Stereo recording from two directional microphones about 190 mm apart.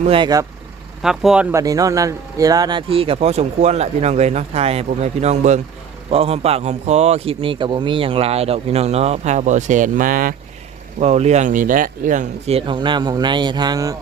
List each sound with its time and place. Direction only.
0.0 s speech: 25° right (ahead or behind)
1.0 s speech: 5° right (ahead or behind); by 10.3 s 45° right (ahead or behind)
11.0 s speech: 35° right (ahead or behind); by 13.9 s 20° right (ahead or behind)